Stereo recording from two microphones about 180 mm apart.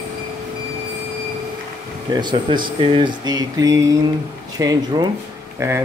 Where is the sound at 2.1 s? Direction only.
25° right (ahead or behind).